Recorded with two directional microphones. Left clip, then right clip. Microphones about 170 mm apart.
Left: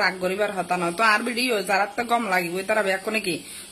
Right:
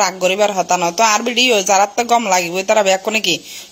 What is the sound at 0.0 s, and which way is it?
A woman's voice, 35° right (ahead or behind).